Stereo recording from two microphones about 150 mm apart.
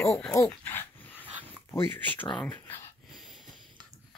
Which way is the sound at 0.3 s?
15° left (ahead or behind).